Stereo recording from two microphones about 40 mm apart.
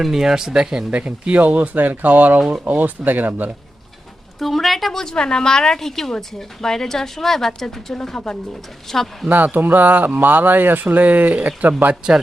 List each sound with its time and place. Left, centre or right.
0.0 s speech: centre
0.9 s speech: right
4.4 s a woman's voice: centre
4.9 s a woman's voice: centre
9.3 s speech: right